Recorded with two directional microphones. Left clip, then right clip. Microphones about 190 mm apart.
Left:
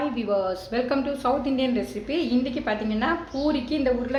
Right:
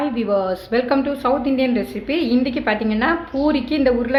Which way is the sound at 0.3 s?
20° right (ahead or behind).